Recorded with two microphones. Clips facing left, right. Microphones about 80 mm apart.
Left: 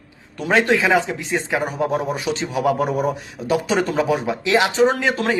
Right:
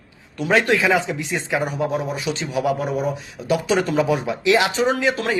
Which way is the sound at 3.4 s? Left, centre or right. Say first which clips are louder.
Even; left.